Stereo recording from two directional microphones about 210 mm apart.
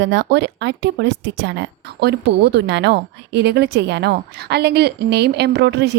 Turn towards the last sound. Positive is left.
turn(degrees=-55)  # may be behind; listen again after turning